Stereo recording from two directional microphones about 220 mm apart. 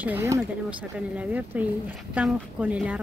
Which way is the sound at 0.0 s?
10° right (ahead or behind).